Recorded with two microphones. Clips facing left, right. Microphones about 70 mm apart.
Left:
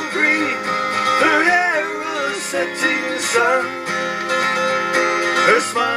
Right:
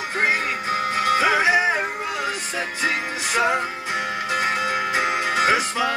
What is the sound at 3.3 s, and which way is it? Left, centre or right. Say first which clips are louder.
Music: left 5 dB; centre.